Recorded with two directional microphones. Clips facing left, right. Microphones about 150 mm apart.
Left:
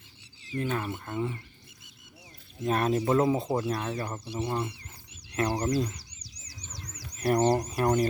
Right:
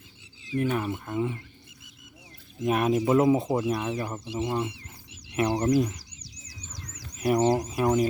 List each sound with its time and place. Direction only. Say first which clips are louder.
0.5 s speech: right 4 dB; 10° right (ahead or behind)
2.6 s speech: right 2 dB; 10° right (ahead or behind)
3.2 s speech: right 5 dB; 20° right (ahead or behind)
3.4 s speech: right 3 dB; 10° right (ahead or behind)
7.2 s speech: right 1 dB; 5° right (ahead or behind)